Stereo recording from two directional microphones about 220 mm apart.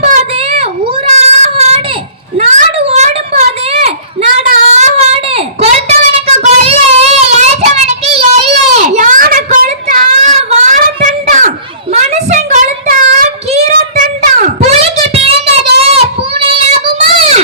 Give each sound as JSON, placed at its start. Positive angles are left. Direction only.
{"t": 0.0, "sound": "child singing", "side_deg": -30}
{"t": 2.4, "sound": "a sound", "side_deg": -30}
{"t": 15.8, "sound": "child singing", "side_deg": -25}